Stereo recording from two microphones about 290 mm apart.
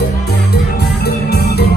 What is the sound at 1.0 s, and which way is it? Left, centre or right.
Music, left.